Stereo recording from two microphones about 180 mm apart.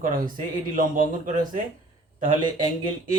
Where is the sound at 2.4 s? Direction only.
25° right (ahead or behind).